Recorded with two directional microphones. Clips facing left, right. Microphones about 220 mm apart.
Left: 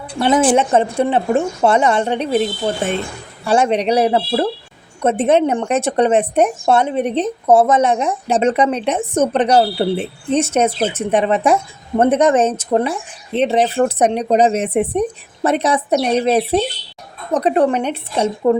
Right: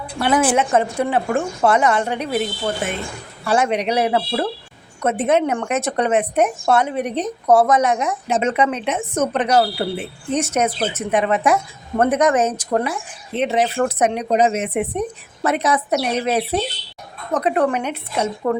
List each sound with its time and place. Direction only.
0.2 s a woman's voice: 25° left (ahead or behind)